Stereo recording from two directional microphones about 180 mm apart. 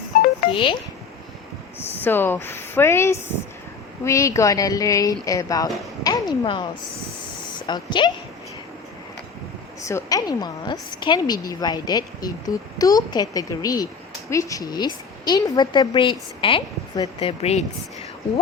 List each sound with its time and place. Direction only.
0.5 s a woman's voice: 30° left (ahead or behind)
2.0 s a woman's voice: 10° left (ahead or behind); by 6.7 s 25° left (ahead or behind)
7.7 s a woman's voice: 25° left (ahead or behind)
9.8 s a woman's voice: 20° left (ahead or behind); by 17.7 s 35° left (ahead or behind)